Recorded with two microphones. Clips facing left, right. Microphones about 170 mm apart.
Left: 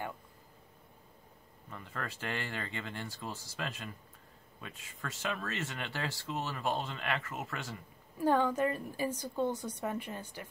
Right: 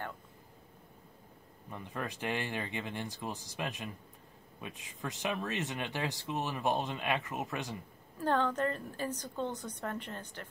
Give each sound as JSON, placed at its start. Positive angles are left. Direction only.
{"t": 1.7, "sound": "speech", "side_deg": -20}
{"t": 8.2, "sound": "a woman's voice", "side_deg": 10}